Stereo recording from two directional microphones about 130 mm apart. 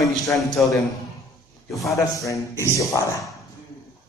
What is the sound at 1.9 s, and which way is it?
Speech, 25° left (ahead or behind).